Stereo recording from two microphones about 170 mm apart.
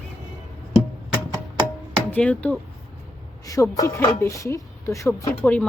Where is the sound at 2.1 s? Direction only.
10° left (ahead or behind).